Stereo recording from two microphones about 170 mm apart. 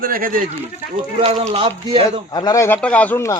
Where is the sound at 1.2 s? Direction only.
40° right (ahead or behind).